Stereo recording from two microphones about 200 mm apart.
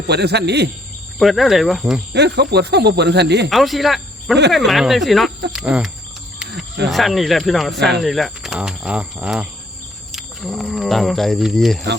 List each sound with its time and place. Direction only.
0.1 s speech: 55° right (ahead or behind)
1.2 s speech: centre (ahead or behind)
2.1 s speech: 55° right (ahead or behind)
3.5 s speech: centre (ahead or behind)
6.9 s speech: centre (ahead or behind)
7.8 s speech: 60° right (ahead or behind)
8.0 s speech: centre (ahead or behind)